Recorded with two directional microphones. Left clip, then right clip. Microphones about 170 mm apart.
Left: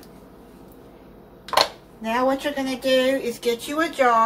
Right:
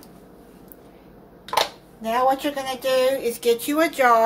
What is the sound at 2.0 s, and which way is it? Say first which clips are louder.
Speech: right 2 dB; 55° right (ahead or behind).